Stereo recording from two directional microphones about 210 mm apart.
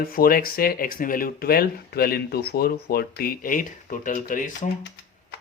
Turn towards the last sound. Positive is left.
turn(degrees=40)  # may be behind; listen again after turning